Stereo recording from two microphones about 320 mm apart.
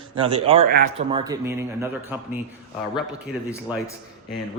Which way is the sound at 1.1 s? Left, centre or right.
Centre.